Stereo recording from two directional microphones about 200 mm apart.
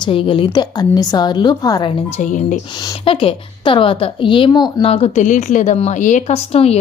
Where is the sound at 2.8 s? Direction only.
25° left (ahead or behind).